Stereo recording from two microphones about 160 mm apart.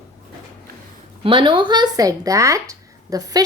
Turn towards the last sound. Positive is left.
turn(degrees=-20)  # may be behind; listen again after turning